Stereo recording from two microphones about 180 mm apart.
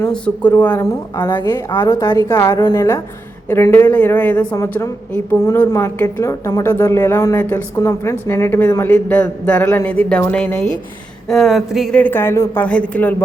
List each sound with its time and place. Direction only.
0.0 s a woman's voice: 10° left (ahead or behind)